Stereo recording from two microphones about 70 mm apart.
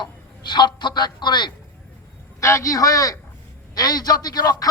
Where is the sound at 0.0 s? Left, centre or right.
Left.